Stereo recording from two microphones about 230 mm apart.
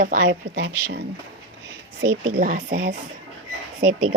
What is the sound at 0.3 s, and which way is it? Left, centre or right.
Speech, right.